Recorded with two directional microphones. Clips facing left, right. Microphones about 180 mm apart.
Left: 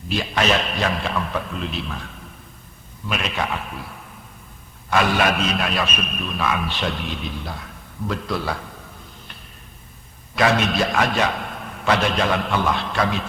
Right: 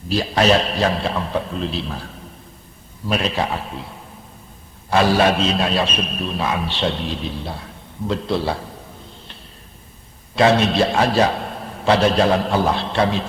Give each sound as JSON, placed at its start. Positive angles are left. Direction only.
{"t": 0.1, "sound": "a man's voice", "side_deg": -35}
{"t": 10.3, "sound": "a man's voice", "side_deg": -30}